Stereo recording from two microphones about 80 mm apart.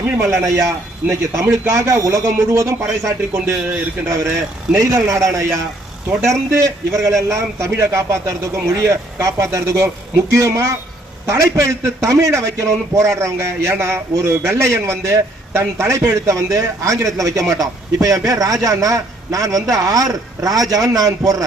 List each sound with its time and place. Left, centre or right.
0.2 s a man's voice: right
1.0 s speech: centre
1.5 s a man's voice: right